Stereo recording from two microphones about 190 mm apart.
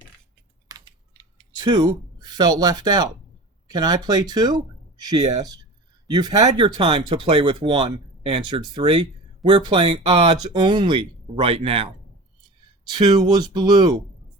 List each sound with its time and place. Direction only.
0.7 s typing: 25° right (ahead or behind)
3.7 s speech: 20° right (ahead or behind)
12.9 s speech: 25° right (ahead or behind)